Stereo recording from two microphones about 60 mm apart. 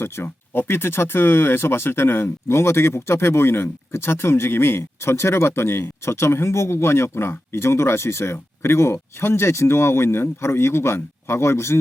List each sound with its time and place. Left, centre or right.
0.0 s speech: left